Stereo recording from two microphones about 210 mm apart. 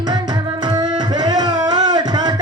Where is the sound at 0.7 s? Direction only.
20° right (ahead or behind).